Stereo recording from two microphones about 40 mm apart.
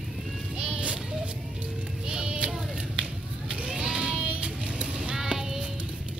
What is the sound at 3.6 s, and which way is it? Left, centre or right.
Vehicle, right.